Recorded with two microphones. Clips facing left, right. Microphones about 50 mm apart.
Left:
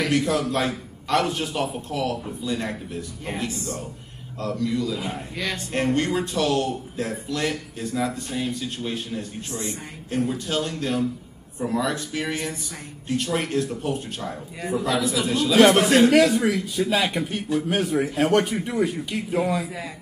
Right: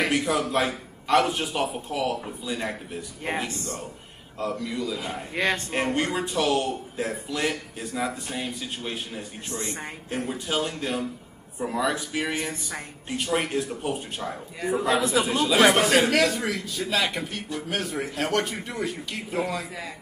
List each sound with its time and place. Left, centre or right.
0.1 s a man's voice: centre
3.3 s speech: right
4.4 s a man's voice: centre
5.3 s speech: right
5.7 s a man's voice: centre
14.9 s a man's voice: right
15.2 s a man's voice: centre